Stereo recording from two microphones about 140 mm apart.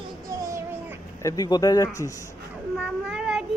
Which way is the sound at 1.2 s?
30° left (ahead or behind).